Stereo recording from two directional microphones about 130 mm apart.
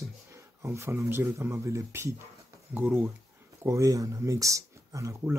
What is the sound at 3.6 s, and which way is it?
Speech, 25° right (ahead or behind).